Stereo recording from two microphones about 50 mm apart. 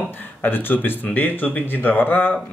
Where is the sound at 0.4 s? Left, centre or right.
Left.